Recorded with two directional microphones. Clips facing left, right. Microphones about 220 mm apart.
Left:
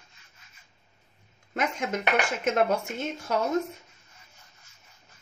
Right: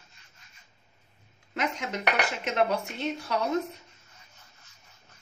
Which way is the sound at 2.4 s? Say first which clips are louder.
Left 1 dB; 45° left (ahead or behind).